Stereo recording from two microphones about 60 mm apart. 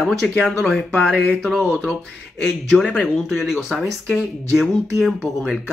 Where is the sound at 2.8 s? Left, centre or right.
Left.